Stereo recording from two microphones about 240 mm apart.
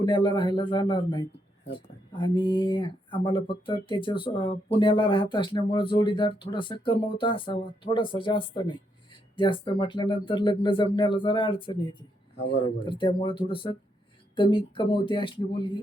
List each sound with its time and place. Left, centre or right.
0.0 s speech: centre
2.2 s speech: centre